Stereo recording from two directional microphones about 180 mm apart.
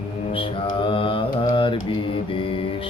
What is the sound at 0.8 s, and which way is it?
Mantra, 30° left (ahead or behind).